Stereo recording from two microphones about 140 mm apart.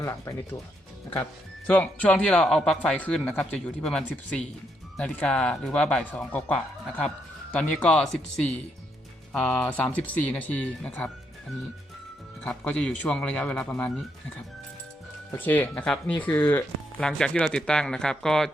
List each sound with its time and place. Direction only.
0.0 s speech: 20° left (ahead or behind)
1.6 s speech: 10° left (ahead or behind)
12.4 s speech: 5° left (ahead or behind)
17.0 s speech: 5° left (ahead or behind)